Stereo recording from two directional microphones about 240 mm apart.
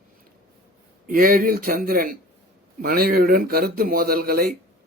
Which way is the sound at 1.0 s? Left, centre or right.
Right.